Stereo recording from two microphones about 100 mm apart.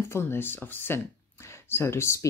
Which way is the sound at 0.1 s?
25° left (ahead or behind).